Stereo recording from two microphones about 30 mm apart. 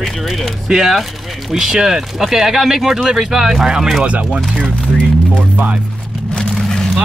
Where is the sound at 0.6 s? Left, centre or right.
Centre.